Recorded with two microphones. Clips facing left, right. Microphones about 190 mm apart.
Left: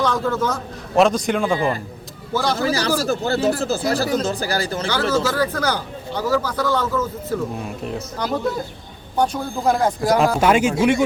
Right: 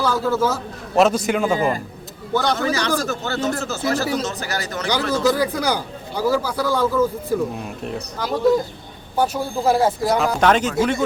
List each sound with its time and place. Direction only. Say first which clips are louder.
0.0 s a man's voice: right 1 dB; 5° right (ahead or behind)
1.5 s a man's voice: right 1 dB; 40° right (ahead or behind)
2.3 s speech: right 1 dB; centre (ahead or behind)
2.6 s speech: left 2 dB; 35° left (ahead or behind)
4.9 s a man's voice: right 3 dB; 15° right (ahead or behind)
7.6 s speech: left 1 dB; centre (ahead or behind)
10.4 s speech: left 1 dB; 10° left (ahead or behind)